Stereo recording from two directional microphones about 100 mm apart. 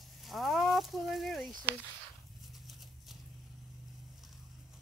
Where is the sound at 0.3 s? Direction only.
Centre (ahead or behind).